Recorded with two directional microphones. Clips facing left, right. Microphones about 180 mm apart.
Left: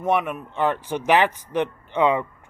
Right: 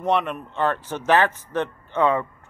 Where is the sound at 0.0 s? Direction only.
10° left (ahead or behind).